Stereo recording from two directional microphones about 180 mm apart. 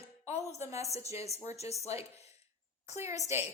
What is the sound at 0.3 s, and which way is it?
A woman's voice, 40° left (ahead or behind).